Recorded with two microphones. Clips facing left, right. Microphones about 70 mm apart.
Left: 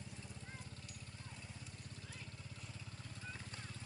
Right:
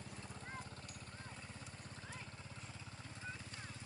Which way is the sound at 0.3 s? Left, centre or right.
Right.